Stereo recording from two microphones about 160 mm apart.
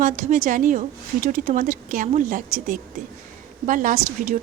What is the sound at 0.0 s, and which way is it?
A woman's voice, 55° right (ahead or behind).